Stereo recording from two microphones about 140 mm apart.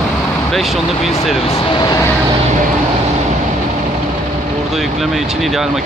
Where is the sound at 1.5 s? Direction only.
35° left (ahead or behind).